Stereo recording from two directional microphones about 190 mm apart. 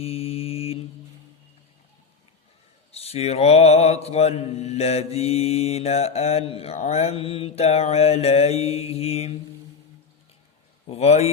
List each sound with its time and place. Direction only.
0.0 s mantra: 30° left (ahead or behind)
2.9 s mantra: 35° left (ahead or behind)
10.8 s mantra: 35° left (ahead or behind)